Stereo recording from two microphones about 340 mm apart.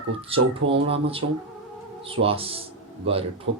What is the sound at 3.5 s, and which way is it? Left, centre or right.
Speech, right.